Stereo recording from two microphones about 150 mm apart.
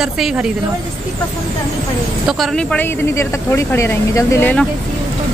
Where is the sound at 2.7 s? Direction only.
15° left (ahead or behind).